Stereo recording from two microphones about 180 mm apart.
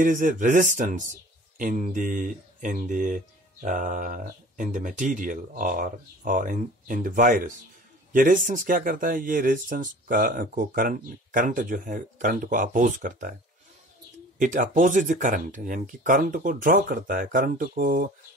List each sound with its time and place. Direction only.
0.0 s speech: 50° right (ahead or behind)
14.4 s speech: 45° right (ahead or behind)